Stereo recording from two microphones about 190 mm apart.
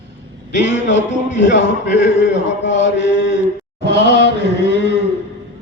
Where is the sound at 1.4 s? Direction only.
70° left (ahead or behind).